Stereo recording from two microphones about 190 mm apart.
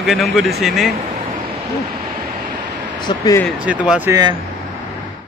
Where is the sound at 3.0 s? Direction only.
25° left (ahead or behind).